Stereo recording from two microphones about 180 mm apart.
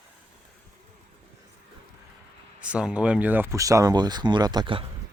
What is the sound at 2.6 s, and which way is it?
Speech, 5° right (ahead or behind).